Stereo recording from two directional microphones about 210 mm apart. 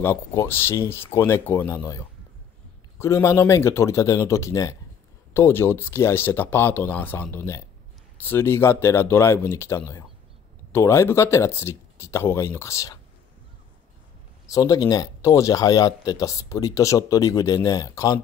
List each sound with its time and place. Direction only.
0.0 s speech: 15° left (ahead or behind)
14.5 s speech: 15° left (ahead or behind)